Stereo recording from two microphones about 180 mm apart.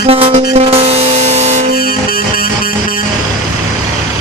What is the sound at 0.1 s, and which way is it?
Music, 35° right (ahead or behind).